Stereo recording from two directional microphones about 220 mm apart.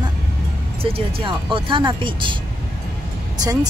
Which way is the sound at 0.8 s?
25° right (ahead or behind).